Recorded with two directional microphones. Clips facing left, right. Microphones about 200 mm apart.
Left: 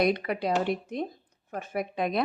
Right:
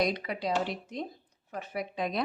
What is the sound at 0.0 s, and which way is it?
Speech, 55° left (ahead or behind).